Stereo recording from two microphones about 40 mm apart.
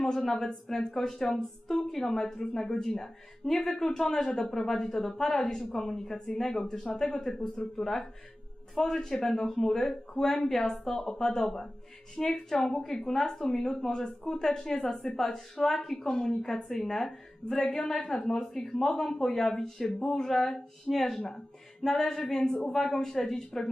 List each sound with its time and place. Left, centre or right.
0.0 s a woman's voice: centre
13.9 s a woman's voice: centre